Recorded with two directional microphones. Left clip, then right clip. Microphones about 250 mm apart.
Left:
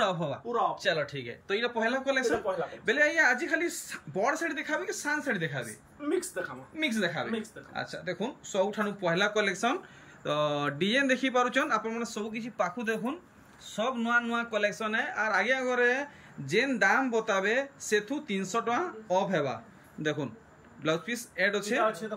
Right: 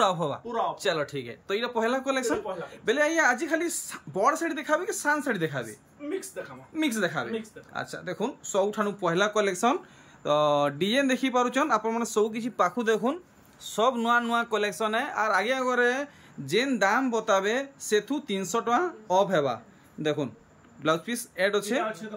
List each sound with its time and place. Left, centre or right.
0.0 s a man's voice: centre
6.8 s speech: centre